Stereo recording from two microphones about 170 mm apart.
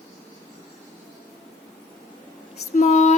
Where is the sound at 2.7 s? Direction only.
45° left (ahead or behind).